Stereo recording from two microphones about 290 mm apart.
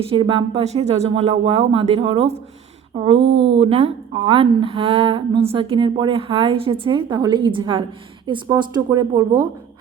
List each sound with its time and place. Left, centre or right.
0.0 s a woman's voice: centre